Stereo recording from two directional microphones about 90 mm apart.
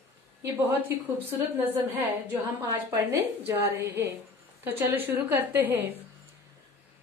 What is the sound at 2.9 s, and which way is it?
A woman's voice, 25° right (ahead or behind).